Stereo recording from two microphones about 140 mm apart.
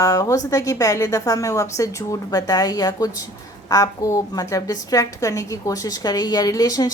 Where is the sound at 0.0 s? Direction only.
25° left (ahead or behind).